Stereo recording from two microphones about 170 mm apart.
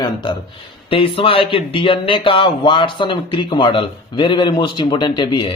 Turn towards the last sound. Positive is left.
turn(degrees=25)  # may be behind; listen again after turning